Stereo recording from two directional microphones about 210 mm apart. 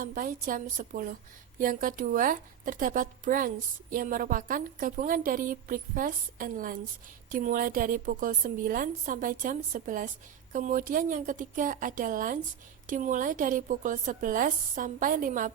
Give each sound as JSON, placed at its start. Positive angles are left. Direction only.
{"t": 0.0, "sound": "a woman's voice", "side_deg": -40}